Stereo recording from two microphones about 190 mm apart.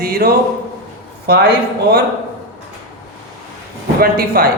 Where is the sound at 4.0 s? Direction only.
55° right (ahead or behind).